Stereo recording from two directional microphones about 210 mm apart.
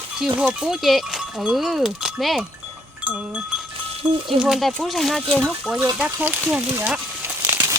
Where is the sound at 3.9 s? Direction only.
25° right (ahead or behind).